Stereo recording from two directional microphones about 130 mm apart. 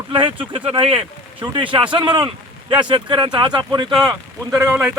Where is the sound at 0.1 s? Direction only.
40° right (ahead or behind).